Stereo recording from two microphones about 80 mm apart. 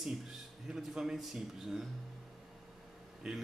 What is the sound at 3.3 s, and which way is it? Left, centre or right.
Speech, centre.